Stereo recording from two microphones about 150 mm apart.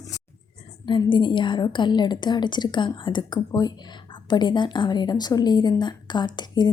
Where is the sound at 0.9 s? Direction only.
30° left (ahead or behind).